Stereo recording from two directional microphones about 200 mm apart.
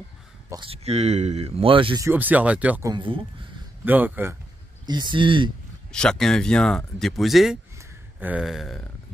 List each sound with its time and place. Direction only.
0.5 s speech: 25° right (ahead or behind)
2.0 s speech: 10° right (ahead or behind)
2.9 s speech: 25° right (ahead or behind)
3.8 s speech: 10° right (ahead or behind)
4.8 s speech: 20° right (ahead or behind)
5.9 s speech: 5° left (ahead or behind)
7.7 s a sound: 10° right (ahead or behind)